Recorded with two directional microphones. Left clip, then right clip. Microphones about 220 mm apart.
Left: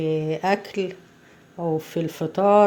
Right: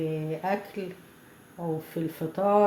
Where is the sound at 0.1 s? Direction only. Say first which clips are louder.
Left 7 dB; 45° left (ahead or behind).